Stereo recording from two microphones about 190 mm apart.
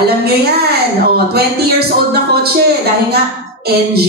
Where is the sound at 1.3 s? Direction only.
55° right (ahead or behind).